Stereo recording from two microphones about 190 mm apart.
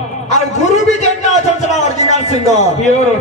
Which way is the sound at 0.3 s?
35° left (ahead or behind).